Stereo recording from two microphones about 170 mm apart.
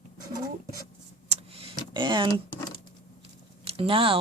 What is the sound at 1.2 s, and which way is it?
Vehicle, 35° right (ahead or behind).